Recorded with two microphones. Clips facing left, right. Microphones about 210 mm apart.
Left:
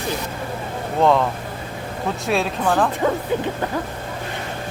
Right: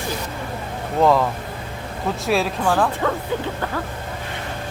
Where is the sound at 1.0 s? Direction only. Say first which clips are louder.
Even; centre (ahead or behind).